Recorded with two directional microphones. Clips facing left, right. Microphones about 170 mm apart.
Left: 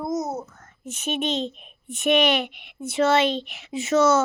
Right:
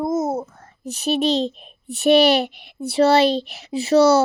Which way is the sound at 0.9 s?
35° right (ahead or behind).